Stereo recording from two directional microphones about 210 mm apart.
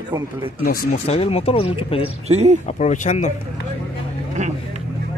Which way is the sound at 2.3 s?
30° right (ahead or behind).